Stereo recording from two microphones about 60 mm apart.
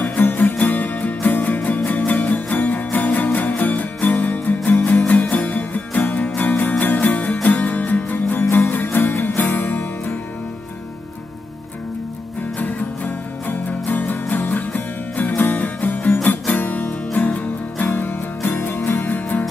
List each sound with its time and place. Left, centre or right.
0.0 s music: left
12.5 s music: left